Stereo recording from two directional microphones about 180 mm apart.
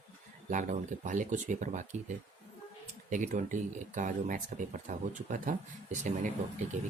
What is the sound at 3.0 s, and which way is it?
Speech, 45° right (ahead or behind).